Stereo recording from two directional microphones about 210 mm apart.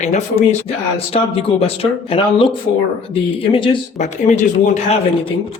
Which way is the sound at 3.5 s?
25° left (ahead or behind).